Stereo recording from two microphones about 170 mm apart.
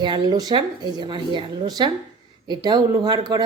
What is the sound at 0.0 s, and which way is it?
A woman's voice, 25° right (ahead or behind).